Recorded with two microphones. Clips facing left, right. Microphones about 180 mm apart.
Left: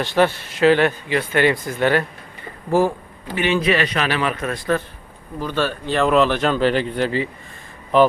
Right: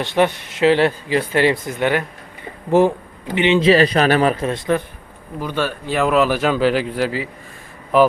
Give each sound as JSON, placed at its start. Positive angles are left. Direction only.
{"t": 0.0, "sound": "a man's voice", "side_deg": -20}